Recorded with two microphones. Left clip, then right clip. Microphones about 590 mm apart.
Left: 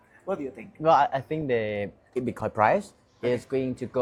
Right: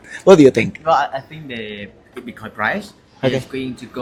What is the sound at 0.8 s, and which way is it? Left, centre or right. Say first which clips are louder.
Speech: right 2 dB; left.